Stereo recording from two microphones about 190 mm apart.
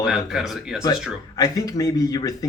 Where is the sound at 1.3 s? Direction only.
20° left (ahead or behind).